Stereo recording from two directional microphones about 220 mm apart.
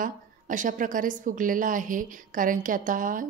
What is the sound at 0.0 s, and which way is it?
A woman's voice, 35° right (ahead or behind).